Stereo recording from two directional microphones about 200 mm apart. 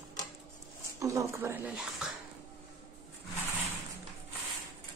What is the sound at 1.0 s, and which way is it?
Speech, 15° right (ahead or behind).